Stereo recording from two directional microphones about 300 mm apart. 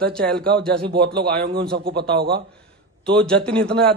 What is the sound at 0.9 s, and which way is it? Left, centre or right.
A man's voice, right.